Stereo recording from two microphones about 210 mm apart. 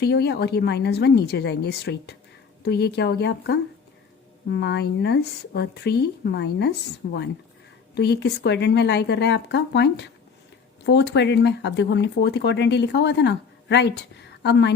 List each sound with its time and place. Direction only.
0.0 s speech: 50° left (ahead or behind)